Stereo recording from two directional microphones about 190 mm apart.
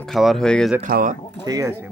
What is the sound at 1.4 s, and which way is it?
Speech, 20° right (ahead or behind).